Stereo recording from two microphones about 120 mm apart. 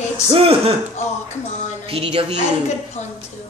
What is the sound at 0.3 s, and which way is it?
Speech, 55° right (ahead or behind).